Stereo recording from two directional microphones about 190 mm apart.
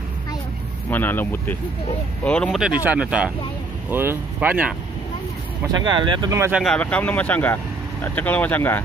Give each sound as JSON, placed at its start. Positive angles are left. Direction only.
{"t": 0.8, "sound": "speech", "side_deg": 10}
{"t": 5.9, "sound": "speech", "side_deg": -25}
{"t": 6.6, "sound": "speech", "side_deg": 5}